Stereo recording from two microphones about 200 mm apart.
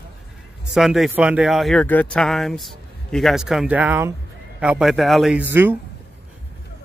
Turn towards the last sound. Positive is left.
turn(degrees=-10)  # may be behind; listen again after turning